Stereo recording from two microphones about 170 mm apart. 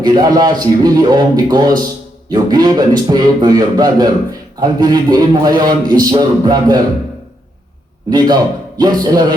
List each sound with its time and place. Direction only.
0.0 s a man's voice: 25° right (ahead or behind)
8.1 s a man's voice: 25° right (ahead or behind)